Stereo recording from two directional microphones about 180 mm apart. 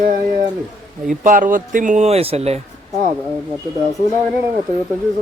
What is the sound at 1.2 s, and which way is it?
Speech, 45° right (ahead or behind).